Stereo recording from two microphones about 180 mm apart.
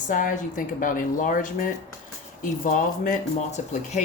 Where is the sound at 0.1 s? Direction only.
45° left (ahead or behind).